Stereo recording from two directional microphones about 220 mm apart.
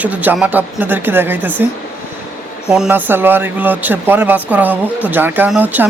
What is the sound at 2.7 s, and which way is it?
Speech, 5° right (ahead or behind).